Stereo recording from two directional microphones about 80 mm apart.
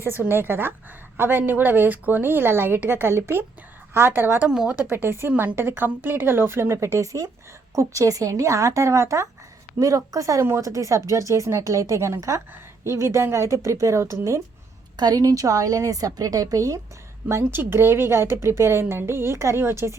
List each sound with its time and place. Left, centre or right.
0.0 s a woman's voice: right
4.4 s a woman's voice: centre
4.9 s a woman's voice: right
14.9 s a woman's voice: right
17.2 s speech: right